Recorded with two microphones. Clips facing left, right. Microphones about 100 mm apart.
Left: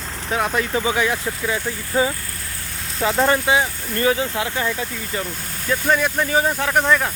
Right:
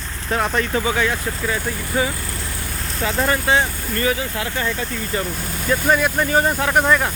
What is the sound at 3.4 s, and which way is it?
Speech, 10° left (ahead or behind).